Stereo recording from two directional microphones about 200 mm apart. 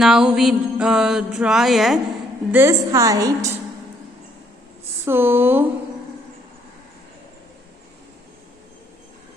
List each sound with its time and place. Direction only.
0.0 s music: 5° right (ahead or behind)
2.5 s a woman's voice: 10° right (ahead or behind)
5.0 s a woman's voice: 10° right (ahead or behind)